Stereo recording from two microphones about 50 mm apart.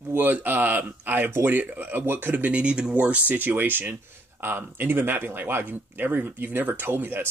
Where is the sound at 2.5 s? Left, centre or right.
Right.